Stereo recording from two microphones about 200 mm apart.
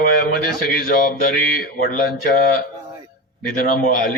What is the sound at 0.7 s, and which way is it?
A man's voice, 45° left (ahead or behind).